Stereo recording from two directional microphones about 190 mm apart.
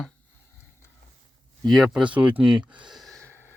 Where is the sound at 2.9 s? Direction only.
Centre (ahead or behind).